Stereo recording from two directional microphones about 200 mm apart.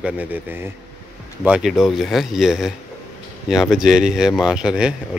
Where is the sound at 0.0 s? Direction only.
10° right (ahead or behind).